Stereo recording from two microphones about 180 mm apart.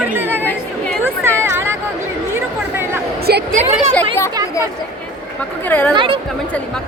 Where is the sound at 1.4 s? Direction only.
10° right (ahead or behind).